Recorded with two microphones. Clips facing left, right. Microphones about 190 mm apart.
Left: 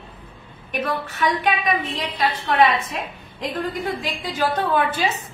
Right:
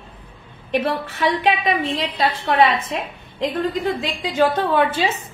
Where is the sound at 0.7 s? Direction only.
30° right (ahead or behind).